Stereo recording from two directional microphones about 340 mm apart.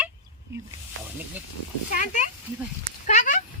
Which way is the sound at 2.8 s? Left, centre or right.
Left.